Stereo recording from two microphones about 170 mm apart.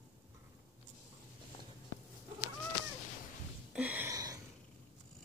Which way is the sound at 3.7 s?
10° right (ahead or behind).